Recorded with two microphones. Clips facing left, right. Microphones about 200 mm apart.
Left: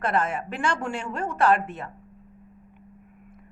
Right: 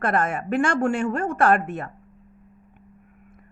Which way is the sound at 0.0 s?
50° right (ahead or behind).